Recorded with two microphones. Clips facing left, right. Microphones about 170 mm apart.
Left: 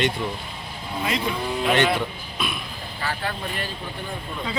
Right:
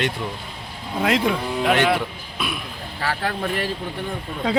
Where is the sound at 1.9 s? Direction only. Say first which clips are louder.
Right 1 dB; 5° right (ahead or behind).